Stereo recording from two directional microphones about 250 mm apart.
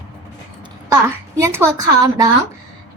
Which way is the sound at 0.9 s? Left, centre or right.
Centre.